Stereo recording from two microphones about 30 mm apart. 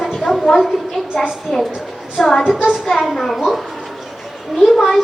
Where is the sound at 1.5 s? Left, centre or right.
Centre.